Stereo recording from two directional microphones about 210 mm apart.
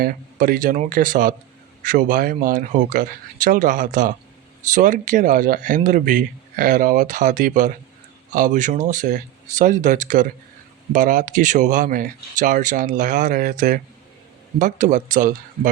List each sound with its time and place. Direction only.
0.0 s speech: 45° right (ahead or behind)